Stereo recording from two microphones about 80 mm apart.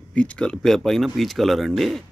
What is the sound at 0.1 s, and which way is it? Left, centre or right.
Speech, centre.